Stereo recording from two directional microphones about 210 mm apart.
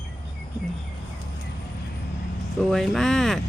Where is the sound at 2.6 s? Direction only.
Centre (ahead or behind).